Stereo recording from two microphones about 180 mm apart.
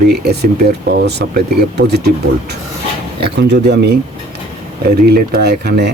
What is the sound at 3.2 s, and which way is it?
Speech, 70° right (ahead or behind).